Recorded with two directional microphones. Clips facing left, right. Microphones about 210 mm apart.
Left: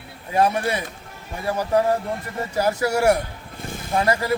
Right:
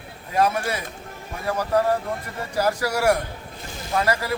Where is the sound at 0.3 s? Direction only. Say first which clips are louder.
Left 2 dB; 30° left (ahead or behind).